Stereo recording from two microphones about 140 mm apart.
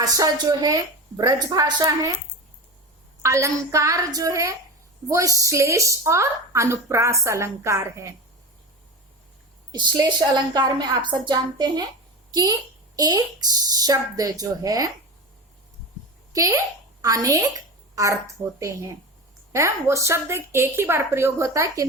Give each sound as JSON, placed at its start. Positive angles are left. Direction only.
{"t": 0.0, "sound": "a woman's voice", "side_deg": -25}
{"t": 3.2, "sound": "a woman's voice", "side_deg": -20}
{"t": 9.7, "sound": "a woman's voice", "side_deg": -30}
{"t": 16.3, "sound": "a child's voice", "side_deg": -25}